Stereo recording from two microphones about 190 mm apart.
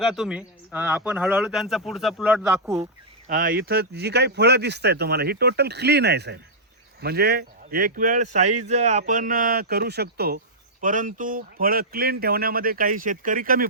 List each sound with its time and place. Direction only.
0.0 s speech: centre (ahead or behind)
3.2 s speech: 50° right (ahead or behind)